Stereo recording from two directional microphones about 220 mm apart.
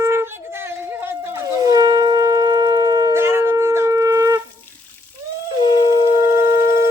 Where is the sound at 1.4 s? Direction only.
15° right (ahead or behind).